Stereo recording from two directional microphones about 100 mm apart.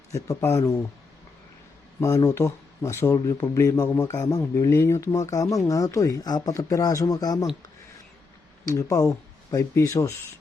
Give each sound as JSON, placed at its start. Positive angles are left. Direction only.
{"t": 0.1, "sound": "speech", "side_deg": 30}
{"t": 2.0, "sound": "speech", "side_deg": 35}
{"t": 8.6, "sound": "speech", "side_deg": 35}